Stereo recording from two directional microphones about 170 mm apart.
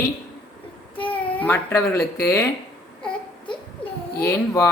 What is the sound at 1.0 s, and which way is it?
A child's voice, 10° left (ahead or behind).